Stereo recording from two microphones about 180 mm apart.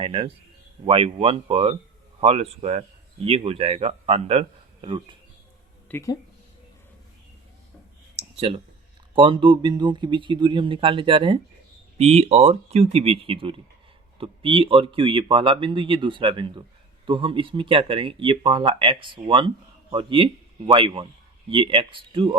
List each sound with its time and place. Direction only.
0.0 s a man's voice: 30° right (ahead or behind)
5.9 s speech: 15° left (ahead or behind)
8.1 s clicking: 30° right (ahead or behind)
9.1 s a man's voice: 30° right (ahead or behind)